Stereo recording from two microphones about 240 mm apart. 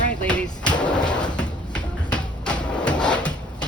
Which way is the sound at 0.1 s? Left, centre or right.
Centre.